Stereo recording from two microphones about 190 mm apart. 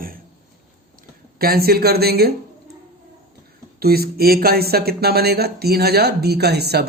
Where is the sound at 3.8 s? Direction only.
55° right (ahead or behind).